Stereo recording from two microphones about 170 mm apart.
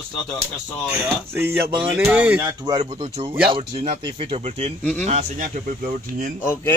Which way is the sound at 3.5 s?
35° right (ahead or behind).